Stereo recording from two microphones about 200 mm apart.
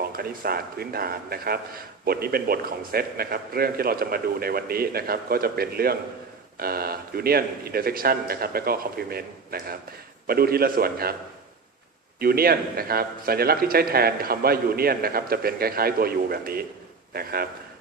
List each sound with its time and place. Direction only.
0.1 s a man's voice: 50° right (ahead or behind)
12.2 s a man's voice: 50° right (ahead or behind)